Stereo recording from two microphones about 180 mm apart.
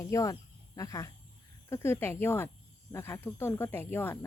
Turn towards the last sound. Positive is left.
turn(degrees=15)  # may be behind; listen again after turning